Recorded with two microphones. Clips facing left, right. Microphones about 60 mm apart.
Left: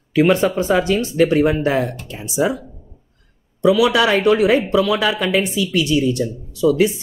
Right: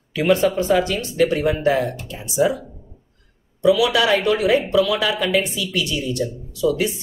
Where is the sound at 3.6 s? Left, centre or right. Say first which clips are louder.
Left 2 dB; left.